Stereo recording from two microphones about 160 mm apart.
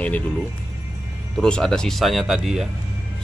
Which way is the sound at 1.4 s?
5° left (ahead or behind).